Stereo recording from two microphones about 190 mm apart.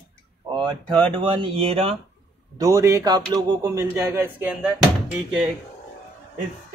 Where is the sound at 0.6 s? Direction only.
25° right (ahead or behind).